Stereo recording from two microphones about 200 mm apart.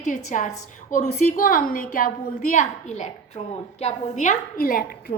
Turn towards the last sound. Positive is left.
turn(degrees=45)  # may be behind; listen again after turning